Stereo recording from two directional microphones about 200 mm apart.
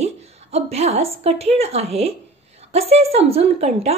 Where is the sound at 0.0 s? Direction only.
30° right (ahead or behind).